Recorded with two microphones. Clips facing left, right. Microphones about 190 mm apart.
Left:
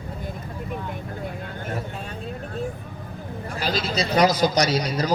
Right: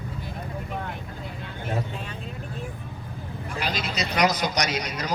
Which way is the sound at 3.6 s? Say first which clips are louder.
Left 4 dB; 30° left (ahead or behind).